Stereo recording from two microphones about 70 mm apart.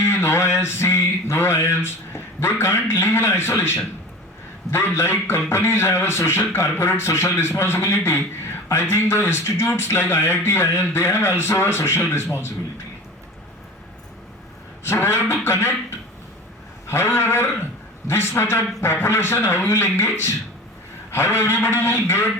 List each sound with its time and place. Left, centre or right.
0.0 s a man's voice: left
14.8 s a man's voice: left
16.8 s a man's voice: left